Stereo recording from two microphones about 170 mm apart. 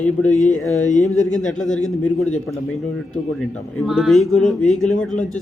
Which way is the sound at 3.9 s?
Centre (ahead or behind).